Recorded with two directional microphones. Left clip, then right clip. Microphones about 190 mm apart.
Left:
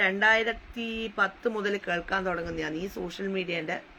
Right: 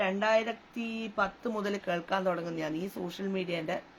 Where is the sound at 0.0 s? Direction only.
15° right (ahead or behind).